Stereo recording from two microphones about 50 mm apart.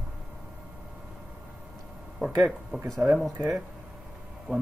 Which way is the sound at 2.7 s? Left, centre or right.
Right.